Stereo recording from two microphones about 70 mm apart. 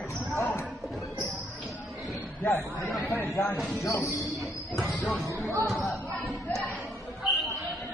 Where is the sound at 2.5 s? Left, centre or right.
Left.